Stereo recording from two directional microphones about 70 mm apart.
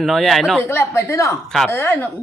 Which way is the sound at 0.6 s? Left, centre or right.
Left.